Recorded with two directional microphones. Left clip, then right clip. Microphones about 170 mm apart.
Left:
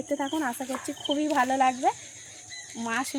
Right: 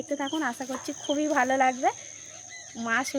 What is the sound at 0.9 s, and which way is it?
Speech, 15° left (ahead or behind).